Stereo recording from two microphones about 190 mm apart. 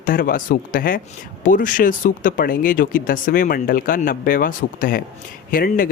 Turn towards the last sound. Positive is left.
turn(degrees=50)  # may be behind; listen again after turning